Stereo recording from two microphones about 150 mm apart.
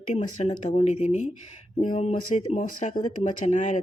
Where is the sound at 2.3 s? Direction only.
55° left (ahead or behind).